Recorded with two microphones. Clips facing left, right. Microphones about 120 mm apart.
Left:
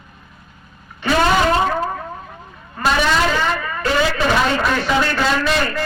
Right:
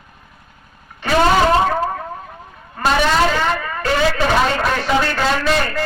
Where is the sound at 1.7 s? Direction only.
40° right (ahead or behind).